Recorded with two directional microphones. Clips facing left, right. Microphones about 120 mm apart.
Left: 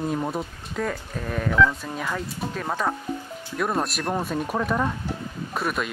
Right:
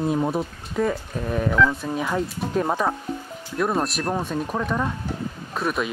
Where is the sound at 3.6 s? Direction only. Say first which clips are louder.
Right 2 dB; centre (ahead or behind).